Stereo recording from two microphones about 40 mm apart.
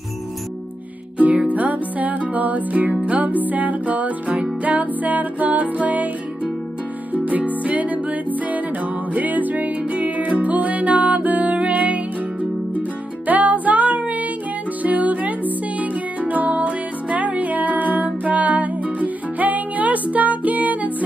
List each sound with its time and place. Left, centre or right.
1.1 s music: right
7.1 s music: right
13.3 s music: right